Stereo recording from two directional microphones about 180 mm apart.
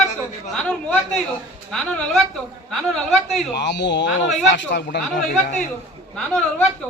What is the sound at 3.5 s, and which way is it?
Speech, 75° left (ahead or behind).